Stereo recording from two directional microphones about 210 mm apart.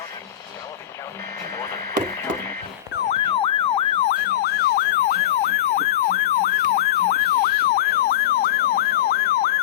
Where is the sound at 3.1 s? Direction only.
25° left (ahead or behind).